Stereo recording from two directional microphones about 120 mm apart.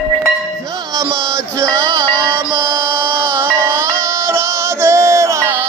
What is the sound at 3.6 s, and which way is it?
Music, 20° right (ahead or behind).